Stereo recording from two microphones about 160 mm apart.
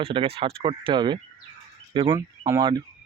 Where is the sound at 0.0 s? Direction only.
35° right (ahead or behind).